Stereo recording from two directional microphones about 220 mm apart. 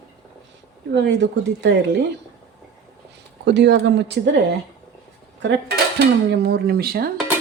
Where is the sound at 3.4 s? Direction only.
50° right (ahead or behind).